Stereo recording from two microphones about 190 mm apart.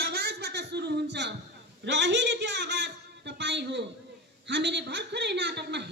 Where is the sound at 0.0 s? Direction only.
55° right (ahead or behind).